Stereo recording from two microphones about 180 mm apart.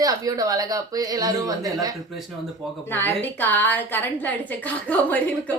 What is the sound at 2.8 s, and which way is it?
A woman's voice, 10° left (ahead or behind).